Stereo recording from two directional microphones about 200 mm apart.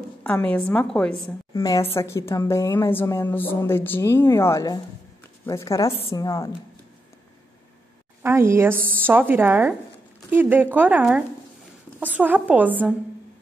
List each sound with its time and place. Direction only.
0.2 s a woman's voice: 10° left (ahead or behind)
1.5 s a woman's voice: 15° left (ahead or behind)
8.2 s speech: 10° right (ahead or behind)